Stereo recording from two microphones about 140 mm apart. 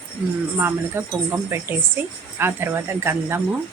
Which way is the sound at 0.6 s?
15° right (ahead or behind).